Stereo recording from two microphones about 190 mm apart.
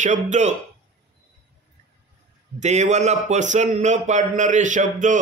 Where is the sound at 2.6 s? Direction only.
35° right (ahead or behind).